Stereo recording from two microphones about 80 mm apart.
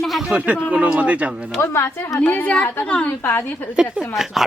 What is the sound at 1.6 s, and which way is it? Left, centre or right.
Speech, left.